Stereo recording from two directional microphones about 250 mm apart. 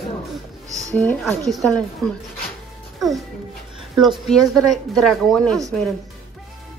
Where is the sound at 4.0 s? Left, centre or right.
Centre.